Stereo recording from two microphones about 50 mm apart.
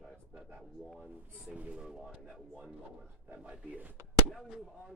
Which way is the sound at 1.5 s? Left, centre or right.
Right.